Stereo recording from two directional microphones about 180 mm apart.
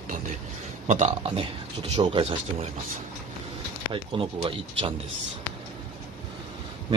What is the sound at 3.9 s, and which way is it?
Speech, 30° right (ahead or behind).